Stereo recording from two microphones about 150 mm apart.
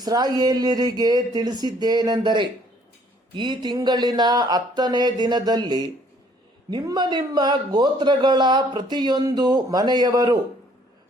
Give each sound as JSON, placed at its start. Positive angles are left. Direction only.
{"t": 0.0, "sound": "a man's voice", "side_deg": -25}